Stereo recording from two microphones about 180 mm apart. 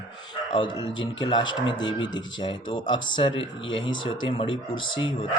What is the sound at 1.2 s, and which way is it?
Speech, 25° left (ahead or behind).